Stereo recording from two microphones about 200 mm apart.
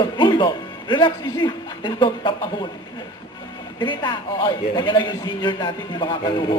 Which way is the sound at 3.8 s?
25° left (ahead or behind).